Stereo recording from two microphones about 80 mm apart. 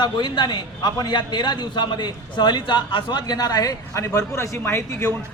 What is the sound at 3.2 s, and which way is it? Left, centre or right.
A man's voice, left.